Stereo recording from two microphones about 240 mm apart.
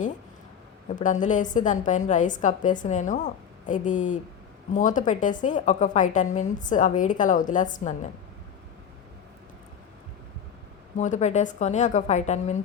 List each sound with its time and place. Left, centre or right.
0.9 s a woman's voice: left
10.9 s a woman's voice: left